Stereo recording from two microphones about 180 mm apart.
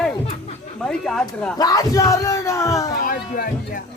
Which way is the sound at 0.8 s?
5° left (ahead or behind).